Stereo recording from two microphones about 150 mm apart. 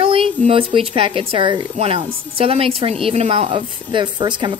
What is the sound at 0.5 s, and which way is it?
A woman's voice, 35° right (ahead or behind).